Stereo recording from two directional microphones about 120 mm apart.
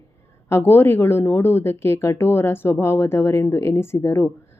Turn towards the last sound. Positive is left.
turn(degrees=20)  # may be behind; listen again after turning